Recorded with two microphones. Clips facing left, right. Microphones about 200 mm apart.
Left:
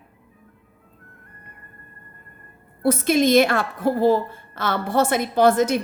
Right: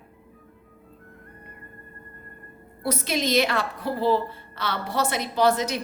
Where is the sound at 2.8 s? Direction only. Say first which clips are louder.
Left 8 dB; 50° left (ahead or behind).